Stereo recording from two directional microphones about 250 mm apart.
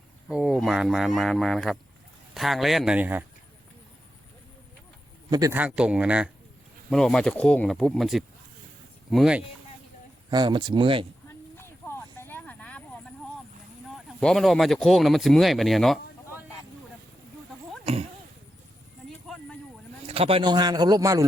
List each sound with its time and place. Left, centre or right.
0.3 s speech: centre
5.3 s speech: centre
10.2 s speech: centre
11.5 s a sound: centre
13.9 s speech: centre
20.1 s a man's voice: right